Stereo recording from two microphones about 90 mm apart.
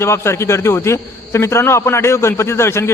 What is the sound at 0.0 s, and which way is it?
A man's voice, 30° left (ahead or behind).